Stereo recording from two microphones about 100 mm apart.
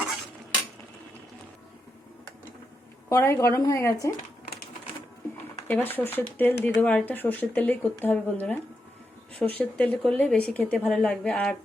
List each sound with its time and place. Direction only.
3.1 s speech: 25° left (ahead or behind)
5.6 s speech: 20° left (ahead or behind)